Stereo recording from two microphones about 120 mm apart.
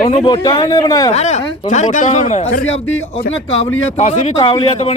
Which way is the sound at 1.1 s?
70° left (ahead or behind).